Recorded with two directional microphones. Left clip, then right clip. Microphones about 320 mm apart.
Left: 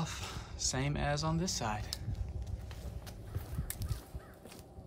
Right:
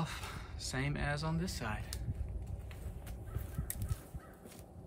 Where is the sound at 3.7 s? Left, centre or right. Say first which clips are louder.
Left 2 dB; centre.